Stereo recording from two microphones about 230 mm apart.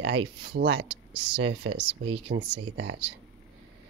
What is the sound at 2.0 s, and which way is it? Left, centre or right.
Speech, right.